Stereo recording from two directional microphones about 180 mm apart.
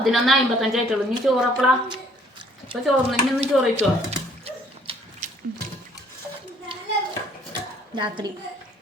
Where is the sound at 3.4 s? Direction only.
35° right (ahead or behind).